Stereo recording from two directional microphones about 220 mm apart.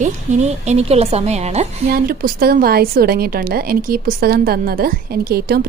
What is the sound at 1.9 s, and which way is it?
A woman's voice, 40° right (ahead or behind).